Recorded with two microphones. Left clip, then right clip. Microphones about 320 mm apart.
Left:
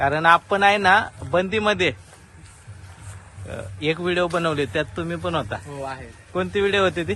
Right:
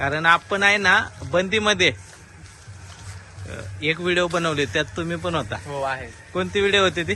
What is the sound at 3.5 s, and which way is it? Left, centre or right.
Speech, centre.